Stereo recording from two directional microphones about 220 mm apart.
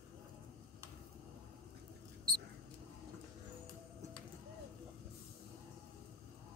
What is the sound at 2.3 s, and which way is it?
Mouse, 40° right (ahead or behind).